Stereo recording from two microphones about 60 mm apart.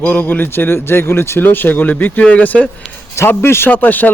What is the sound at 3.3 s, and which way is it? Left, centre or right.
Speech, left.